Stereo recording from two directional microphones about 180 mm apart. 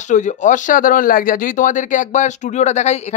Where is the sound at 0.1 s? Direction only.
45° left (ahead or behind).